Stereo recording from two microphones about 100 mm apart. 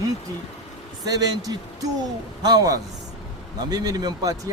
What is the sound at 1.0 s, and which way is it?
Speech, 40° right (ahead or behind).